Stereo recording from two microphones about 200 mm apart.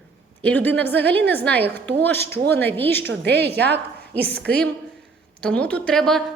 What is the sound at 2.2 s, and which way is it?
Speech, 55° right (ahead or behind).